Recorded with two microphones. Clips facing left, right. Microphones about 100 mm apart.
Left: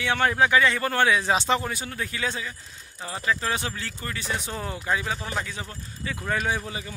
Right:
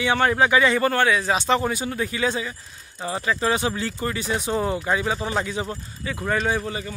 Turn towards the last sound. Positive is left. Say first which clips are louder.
# right 4 dB
turn(degrees=5)  # may be behind; listen again after turning